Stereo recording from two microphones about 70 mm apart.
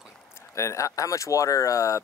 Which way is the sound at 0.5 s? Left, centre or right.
Left.